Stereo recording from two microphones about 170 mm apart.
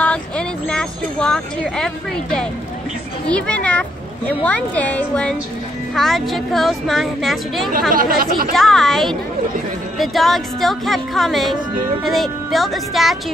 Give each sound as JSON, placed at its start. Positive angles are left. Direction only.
{"t": 0.0, "sound": "a sound", "side_deg": 5}
{"t": 3.3, "sound": "speech", "side_deg": 5}
{"t": 7.9, "sound": "speech", "side_deg": -60}
{"t": 8.5, "sound": "speech", "side_deg": 0}